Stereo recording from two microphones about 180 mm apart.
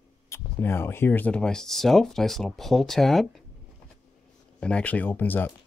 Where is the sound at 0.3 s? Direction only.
15° left (ahead or behind).